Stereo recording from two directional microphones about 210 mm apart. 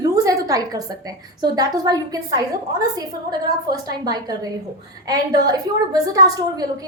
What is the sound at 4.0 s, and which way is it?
A woman's voice, 20° right (ahead or behind).